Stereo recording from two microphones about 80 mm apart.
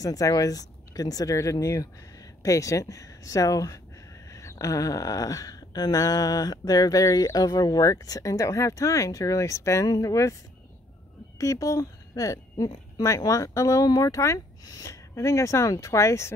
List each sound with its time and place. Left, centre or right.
0.0 s speech: left
11.3 s a woman's voice: left